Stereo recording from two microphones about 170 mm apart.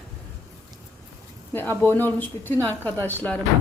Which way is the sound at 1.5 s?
10° left (ahead or behind).